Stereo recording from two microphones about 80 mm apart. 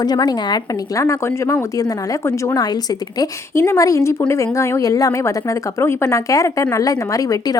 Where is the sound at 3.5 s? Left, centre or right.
Left.